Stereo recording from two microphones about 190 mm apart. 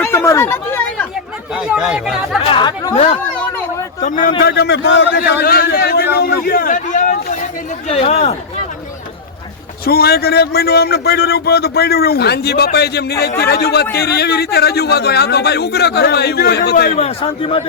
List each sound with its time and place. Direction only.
0.0 s chatter: 15° left (ahead or behind)
1.5 s speech: 5° right (ahead or behind)
2.4 s speech: 25° left (ahead or behind)
2.9 s a man's voice: 35° left (ahead or behind)
4.0 s a man's voice: 45° left (ahead or behind); by 5.2 s 70° left (ahead or behind)
5.4 s a man's voice: 50° left (ahead or behind); by 8.4 s 35° left (ahead or behind)
9.8 s a man's voice: 55° left (ahead or behind)
17.0 s a man's voice: 30° left (ahead or behind)